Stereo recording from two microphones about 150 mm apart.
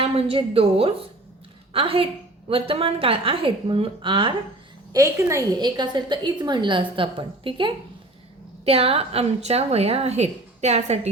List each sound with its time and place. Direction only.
0.0 s a woman's voice: 40° right (ahead or behind)
4.9 s a woman's voice: 20° right (ahead or behind); by 11.1 s 45° right (ahead or behind)